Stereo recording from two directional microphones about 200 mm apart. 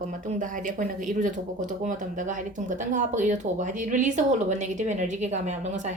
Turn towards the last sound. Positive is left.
turn(degrees=-35)  # may be behind; listen again after turning